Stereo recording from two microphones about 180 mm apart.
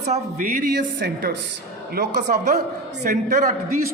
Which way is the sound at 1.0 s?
65° right (ahead or behind).